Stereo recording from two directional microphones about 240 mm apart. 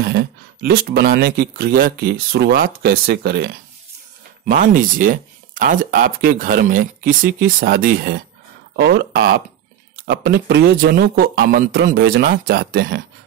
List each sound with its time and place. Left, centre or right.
0.0 s speech: right